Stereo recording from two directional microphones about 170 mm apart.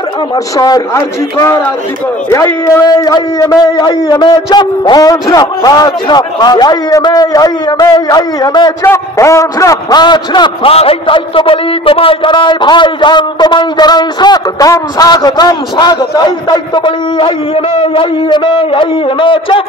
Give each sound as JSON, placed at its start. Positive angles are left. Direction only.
{"t": 0.6, "sound": "a man's voice", "side_deg": 20}